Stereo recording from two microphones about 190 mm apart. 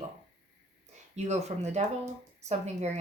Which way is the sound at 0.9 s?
35° right (ahead or behind).